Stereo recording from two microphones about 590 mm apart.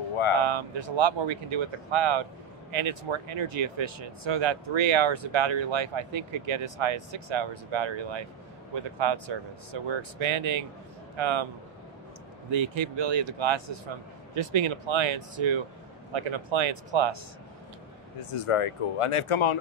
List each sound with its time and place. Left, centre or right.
0.4 s a sound: right
0.7 s speech: right
4.0 s speech: right
12.4 s speech: right
12.7 s speech: right
18.3 s speech: left